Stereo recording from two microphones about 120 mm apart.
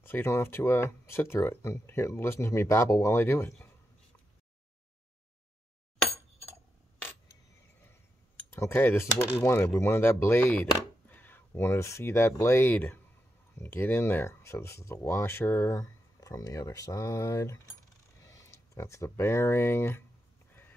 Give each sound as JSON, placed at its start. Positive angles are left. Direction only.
{"t": 0.0, "sound": "speech", "side_deg": 20}
{"t": 8.5, "sound": "speech", "side_deg": 20}